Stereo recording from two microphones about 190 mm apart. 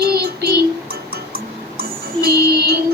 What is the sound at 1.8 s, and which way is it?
Music, 55° right (ahead or behind).